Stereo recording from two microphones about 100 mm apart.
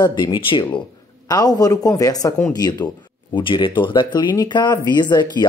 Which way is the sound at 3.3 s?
55° left (ahead or behind).